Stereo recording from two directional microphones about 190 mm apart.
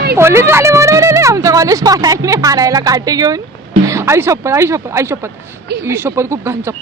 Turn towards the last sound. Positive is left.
turn(degrees=-15)  # may be behind; listen again after turning